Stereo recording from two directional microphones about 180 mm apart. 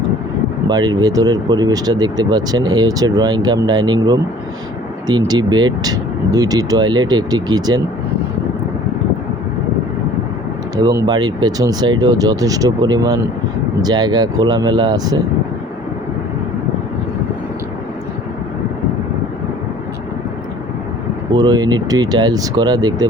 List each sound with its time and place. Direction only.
0.7 s speech: 25° right (ahead or behind)
10.8 s speech: 20° right (ahead or behind)
21.3 s speech: 25° right (ahead or behind)